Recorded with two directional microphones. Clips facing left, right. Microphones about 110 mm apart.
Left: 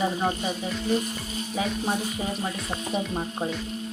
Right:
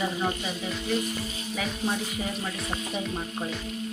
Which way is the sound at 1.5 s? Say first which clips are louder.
Left 3 dB; 20° left (ahead or behind).